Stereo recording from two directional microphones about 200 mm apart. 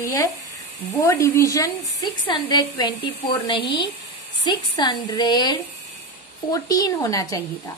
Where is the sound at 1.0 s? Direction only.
15° left (ahead or behind).